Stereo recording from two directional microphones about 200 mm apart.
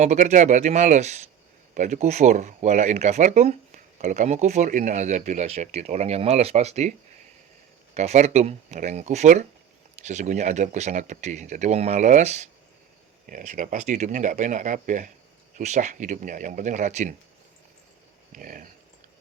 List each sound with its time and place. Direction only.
0.0 s speech: 35° right (ahead or behind)
7.9 s speech: 35° right (ahead or behind)
18.3 s speech: 45° right (ahead or behind)